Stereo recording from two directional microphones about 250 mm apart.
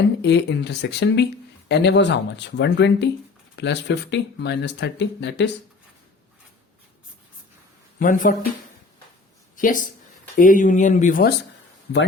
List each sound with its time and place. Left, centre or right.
0.2 s speech: left
7.9 s speech: left
9.6 s speech: left